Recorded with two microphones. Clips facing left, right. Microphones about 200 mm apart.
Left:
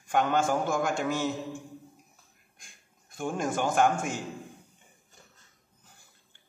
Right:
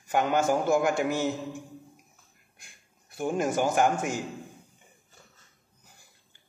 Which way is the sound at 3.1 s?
5° right (ahead or behind).